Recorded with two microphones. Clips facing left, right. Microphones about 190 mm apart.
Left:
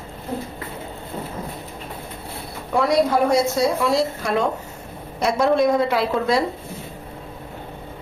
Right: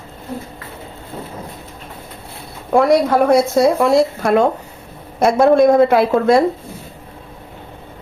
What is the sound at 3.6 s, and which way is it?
A woman's voice, 55° right (ahead or behind).